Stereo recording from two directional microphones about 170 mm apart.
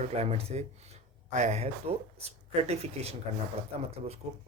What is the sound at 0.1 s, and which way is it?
A man's voice, 35° right (ahead or behind).